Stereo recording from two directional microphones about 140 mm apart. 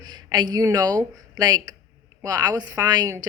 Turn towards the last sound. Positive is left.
turn(degrees=-30)  # may be behind; listen again after turning